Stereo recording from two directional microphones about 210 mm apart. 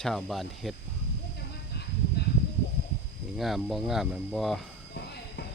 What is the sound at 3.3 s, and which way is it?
Speech, centre (ahead or behind).